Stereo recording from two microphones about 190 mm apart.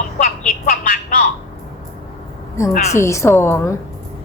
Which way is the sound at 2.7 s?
35° left (ahead or behind).